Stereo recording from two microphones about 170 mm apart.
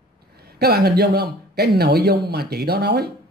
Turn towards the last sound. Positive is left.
turn(degrees=-75)  # may be behind; listen again after turning